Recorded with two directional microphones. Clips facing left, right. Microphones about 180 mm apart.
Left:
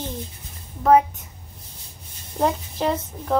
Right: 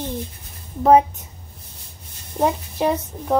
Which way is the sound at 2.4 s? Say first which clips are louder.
Right 2 dB; 15° right (ahead or behind).